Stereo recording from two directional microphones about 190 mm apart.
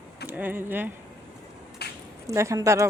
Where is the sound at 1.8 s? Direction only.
60° left (ahead or behind).